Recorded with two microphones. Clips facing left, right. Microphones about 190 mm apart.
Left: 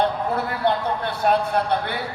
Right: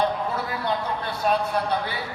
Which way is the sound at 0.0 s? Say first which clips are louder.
Left 3 dB; 60° left (ahead or behind).